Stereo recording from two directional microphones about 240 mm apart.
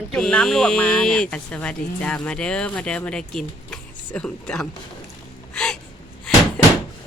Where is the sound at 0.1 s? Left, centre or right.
Centre.